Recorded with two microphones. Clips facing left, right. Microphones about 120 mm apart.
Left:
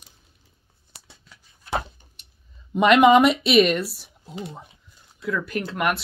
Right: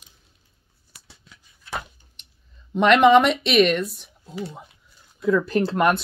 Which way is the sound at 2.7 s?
5° left (ahead or behind).